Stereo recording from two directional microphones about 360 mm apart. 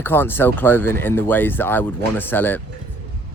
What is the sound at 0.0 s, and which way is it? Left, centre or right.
Speech, centre.